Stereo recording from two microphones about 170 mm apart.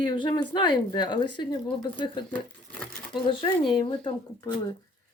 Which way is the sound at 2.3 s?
5° left (ahead or behind).